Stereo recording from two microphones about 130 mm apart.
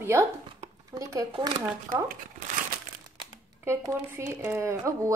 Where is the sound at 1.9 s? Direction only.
90° right.